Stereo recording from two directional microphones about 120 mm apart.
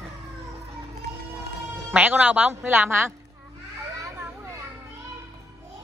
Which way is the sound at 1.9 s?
15° right (ahead or behind).